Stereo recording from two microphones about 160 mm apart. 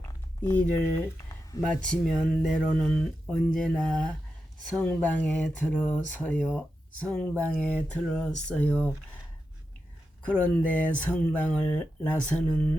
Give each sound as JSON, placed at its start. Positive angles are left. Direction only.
{"t": 0.4, "sound": "speech", "side_deg": 15}
{"t": 1.3, "sound": "a sound", "side_deg": 20}
{"t": 1.8, "sound": "speech", "side_deg": 5}
{"t": 10.2, "sound": "speech", "side_deg": 10}